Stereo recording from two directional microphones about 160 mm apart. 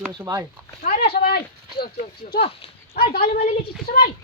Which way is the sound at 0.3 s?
25° right (ahead or behind).